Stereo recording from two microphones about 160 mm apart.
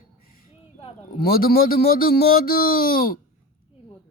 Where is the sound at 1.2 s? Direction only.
65° left (ahead or behind).